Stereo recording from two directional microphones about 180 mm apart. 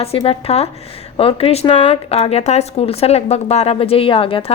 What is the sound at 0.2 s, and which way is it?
Speech, 30° left (ahead or behind).